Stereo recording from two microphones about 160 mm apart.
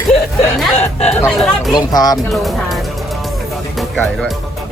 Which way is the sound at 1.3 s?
Centre (ahead or behind).